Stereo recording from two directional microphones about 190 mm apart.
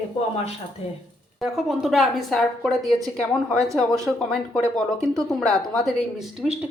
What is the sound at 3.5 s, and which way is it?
Speech, 15° right (ahead or behind).